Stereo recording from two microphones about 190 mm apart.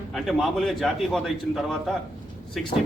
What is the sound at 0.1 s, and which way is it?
A man's voice, centre (ahead or behind).